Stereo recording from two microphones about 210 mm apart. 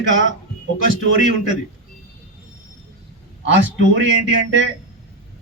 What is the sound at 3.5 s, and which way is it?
Speech, 60° right (ahead or behind).